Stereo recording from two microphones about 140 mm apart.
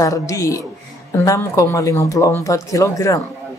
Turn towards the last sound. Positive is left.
turn(degrees=20)  # may be behind; listen again after turning